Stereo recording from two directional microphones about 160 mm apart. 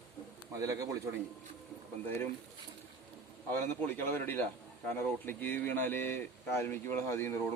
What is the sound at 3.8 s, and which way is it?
Speech, 10° left (ahead or behind).